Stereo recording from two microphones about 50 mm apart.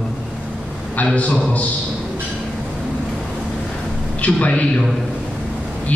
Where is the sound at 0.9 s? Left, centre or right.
Left.